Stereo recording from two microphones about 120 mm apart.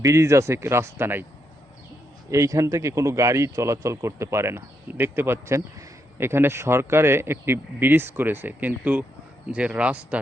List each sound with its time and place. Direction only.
0.0 s speech: 25° right (ahead or behind)
2.3 s speech: 25° right (ahead or behind)